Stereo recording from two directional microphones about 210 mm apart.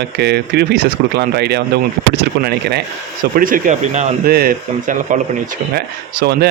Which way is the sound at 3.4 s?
40° right (ahead or behind).